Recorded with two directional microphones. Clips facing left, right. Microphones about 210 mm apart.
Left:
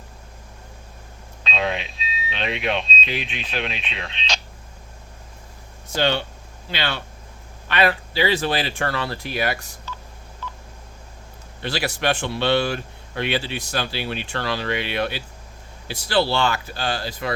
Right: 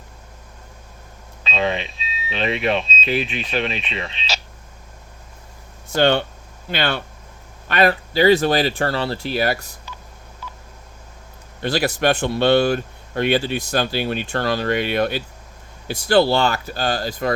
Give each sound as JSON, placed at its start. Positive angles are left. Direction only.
{"t": 1.5, "sound": "speech", "side_deg": 0}
{"t": 5.9, "sound": "speech", "side_deg": -55}
{"t": 9.9, "sound": "telephone dialing", "side_deg": -15}
{"t": 11.6, "sound": "speech", "side_deg": -45}